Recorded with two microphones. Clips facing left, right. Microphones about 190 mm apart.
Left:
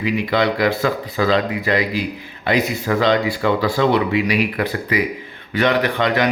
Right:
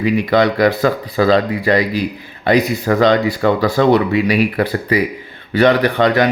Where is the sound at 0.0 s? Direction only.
45° right (ahead or behind).